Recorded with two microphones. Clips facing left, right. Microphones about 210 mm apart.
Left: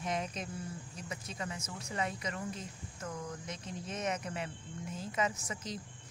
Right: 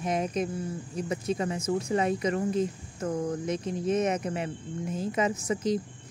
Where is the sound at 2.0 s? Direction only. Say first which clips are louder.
Right 11 dB; 20° right (ahead or behind).